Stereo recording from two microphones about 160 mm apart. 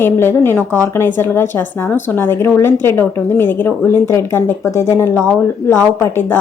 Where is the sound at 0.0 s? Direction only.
15° left (ahead or behind).